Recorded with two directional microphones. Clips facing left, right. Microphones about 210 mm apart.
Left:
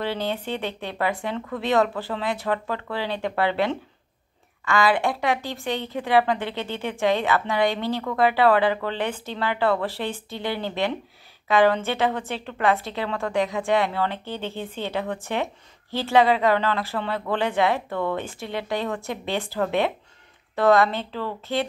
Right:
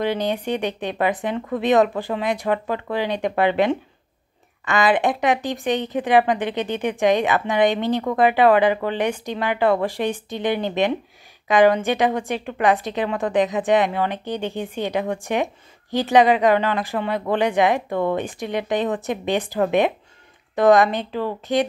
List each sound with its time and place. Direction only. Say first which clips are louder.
0.0 s a woman's voice: right 5 dB; 15° right (ahead or behind)